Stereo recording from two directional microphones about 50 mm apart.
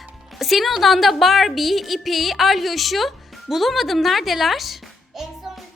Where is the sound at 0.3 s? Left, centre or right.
Centre.